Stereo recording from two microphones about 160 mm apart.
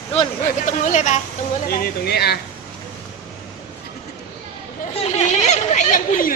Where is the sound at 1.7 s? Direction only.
80° left.